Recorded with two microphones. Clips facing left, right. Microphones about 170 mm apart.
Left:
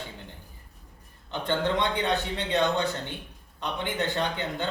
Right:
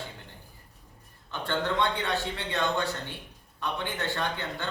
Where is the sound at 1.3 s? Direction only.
15° left (ahead or behind).